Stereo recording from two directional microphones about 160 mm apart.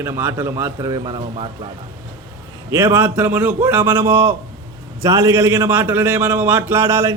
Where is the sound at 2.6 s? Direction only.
15° right (ahead or behind).